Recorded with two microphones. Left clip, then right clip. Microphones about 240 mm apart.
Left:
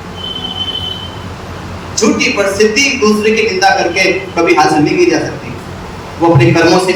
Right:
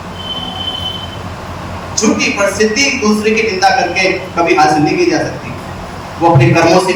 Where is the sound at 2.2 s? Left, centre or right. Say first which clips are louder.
Left 2 dB; left.